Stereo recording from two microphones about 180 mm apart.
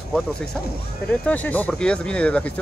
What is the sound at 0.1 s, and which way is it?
Speech, 5° left (ahead or behind).